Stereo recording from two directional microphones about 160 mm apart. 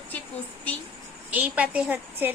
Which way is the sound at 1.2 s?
10° right (ahead or behind).